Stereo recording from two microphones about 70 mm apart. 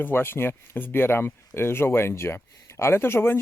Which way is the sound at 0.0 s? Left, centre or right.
Left.